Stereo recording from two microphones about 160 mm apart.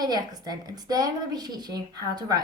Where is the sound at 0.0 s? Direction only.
25° right (ahead or behind).